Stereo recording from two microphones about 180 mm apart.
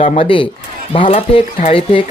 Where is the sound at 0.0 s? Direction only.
30° left (ahead or behind).